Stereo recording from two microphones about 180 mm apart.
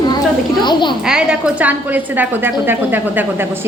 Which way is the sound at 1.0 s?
5° right (ahead or behind).